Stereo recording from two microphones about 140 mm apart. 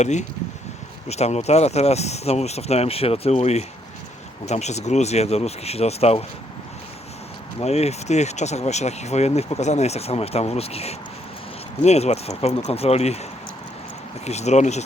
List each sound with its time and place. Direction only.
0.0 s speech: 55° left (ahead or behind)
7.6 s speech: 50° left (ahead or behind)
14.3 s speech: 50° left (ahead or behind)